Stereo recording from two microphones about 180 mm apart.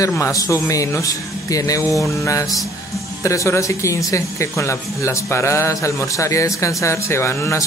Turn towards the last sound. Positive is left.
turn(degrees=15)  # may be behind; listen again after turning